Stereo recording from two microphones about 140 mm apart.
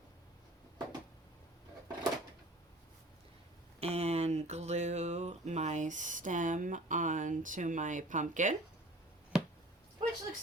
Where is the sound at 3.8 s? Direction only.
50° right (ahead or behind); by 8.6 s 65° right (ahead or behind).